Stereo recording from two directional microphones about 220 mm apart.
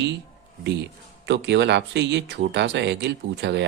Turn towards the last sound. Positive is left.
turn(degrees=-50)  # may be behind; listen again after turning